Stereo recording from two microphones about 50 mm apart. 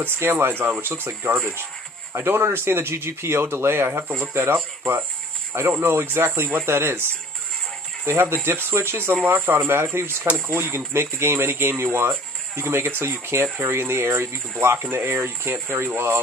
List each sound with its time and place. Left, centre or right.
0.0 s speech: right
2.1 s speech: right
5.7 s speech: right